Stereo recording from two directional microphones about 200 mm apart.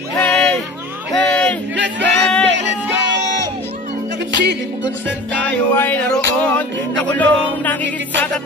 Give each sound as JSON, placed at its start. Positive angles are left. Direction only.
{"t": 0.1, "sound": "a sound", "side_deg": 5}
{"t": 2.0, "sound": "music", "side_deg": 5}
{"t": 4.3, "sound": "music", "side_deg": -60}
{"t": 5.3, "sound": "music", "side_deg": 5}